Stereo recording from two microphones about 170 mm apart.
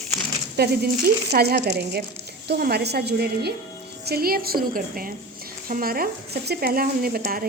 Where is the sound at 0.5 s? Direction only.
70° right (ahead or behind).